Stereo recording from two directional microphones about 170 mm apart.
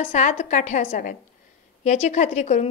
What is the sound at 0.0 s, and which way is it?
A woman's voice, 45° left (ahead or behind).